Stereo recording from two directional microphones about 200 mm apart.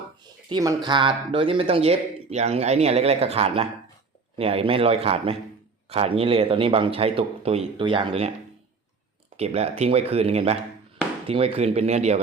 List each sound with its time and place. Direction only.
0.2 s a sound: 20° right (ahead or behind)
0.9 s speech: 25° right (ahead or behind)
9.4 s speech: 30° right (ahead or behind)